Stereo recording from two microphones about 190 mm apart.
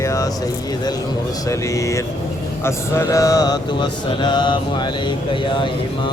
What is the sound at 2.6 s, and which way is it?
Mantra, 15° left (ahead or behind).